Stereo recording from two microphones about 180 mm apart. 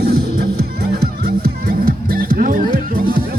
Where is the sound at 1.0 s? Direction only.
55° right (ahead or behind).